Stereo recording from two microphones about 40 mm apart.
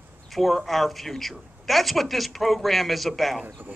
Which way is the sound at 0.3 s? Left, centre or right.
Centre.